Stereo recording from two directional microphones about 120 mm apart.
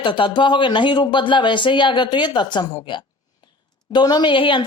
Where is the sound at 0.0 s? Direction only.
40° left (ahead or behind).